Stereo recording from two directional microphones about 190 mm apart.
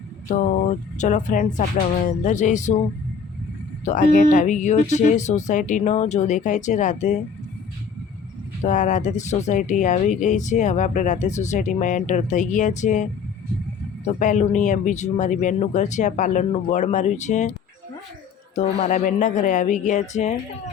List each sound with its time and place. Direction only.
0.3 s speech: 40° left (ahead or behind)
3.8 s speech: 40° left (ahead or behind)
8.6 s speech: 40° left (ahead or behind)
18.5 s speech: 35° left (ahead or behind)